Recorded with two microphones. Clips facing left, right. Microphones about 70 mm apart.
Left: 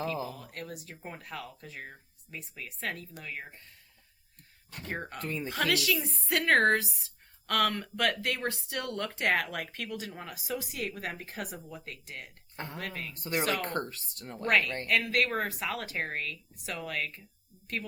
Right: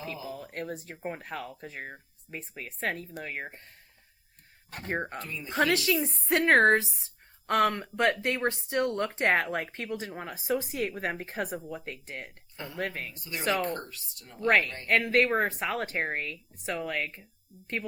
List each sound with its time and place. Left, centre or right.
0.3 s speech: right
4.7 s speech: right
5.2 s speech: left
5.5 s a woman's voice: right
13.1 s speech: left
14.4 s a woman's voice: right